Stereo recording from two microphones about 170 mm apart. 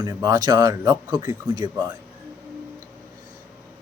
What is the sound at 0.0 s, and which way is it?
Speech, 20° right (ahead or behind).